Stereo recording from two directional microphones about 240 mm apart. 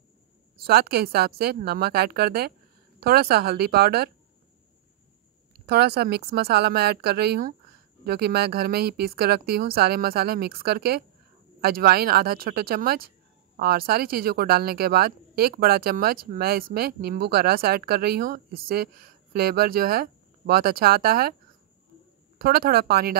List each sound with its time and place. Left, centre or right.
0.7 s speech: right
5.7 s speech: right
22.4 s speech: right